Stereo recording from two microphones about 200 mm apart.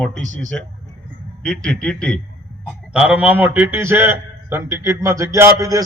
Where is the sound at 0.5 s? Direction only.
5° left (ahead or behind).